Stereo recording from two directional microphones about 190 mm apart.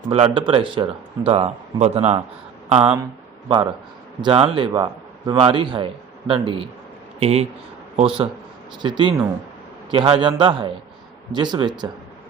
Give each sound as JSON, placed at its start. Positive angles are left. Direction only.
{"t": 0.1, "sound": "speech", "side_deg": -30}
{"t": 4.2, "sound": "a man's voice", "side_deg": -30}